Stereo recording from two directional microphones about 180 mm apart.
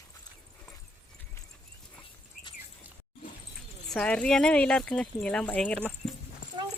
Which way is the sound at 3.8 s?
5° left (ahead or behind).